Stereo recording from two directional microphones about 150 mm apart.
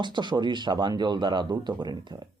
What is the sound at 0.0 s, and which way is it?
Speech, 30° right (ahead or behind).